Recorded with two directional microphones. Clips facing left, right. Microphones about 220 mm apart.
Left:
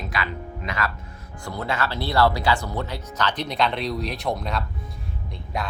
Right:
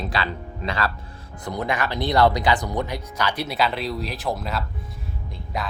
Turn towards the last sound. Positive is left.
turn(degrees=0)  # may be behind; listen again after turning